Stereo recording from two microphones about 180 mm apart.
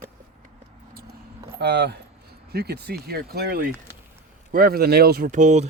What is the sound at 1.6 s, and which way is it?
Speech, 65° right (ahead or behind).